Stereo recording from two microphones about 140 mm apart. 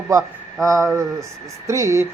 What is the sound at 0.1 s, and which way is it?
A man's voice, 25° right (ahead or behind).